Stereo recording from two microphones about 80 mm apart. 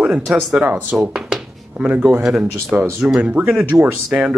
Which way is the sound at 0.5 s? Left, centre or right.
Centre.